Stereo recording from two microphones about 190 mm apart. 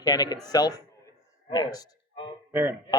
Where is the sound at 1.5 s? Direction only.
20° left (ahead or behind).